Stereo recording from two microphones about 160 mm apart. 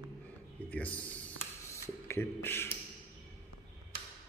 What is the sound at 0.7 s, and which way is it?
Speech, 10° left (ahead or behind).